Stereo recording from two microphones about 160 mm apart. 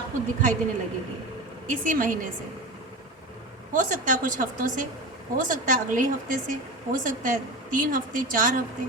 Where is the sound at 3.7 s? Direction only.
55° right (ahead or behind).